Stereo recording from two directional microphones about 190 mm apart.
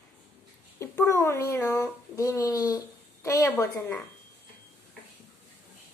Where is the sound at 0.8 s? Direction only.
15° left (ahead or behind).